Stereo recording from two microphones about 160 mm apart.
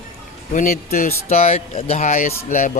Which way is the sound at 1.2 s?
40° left (ahead or behind).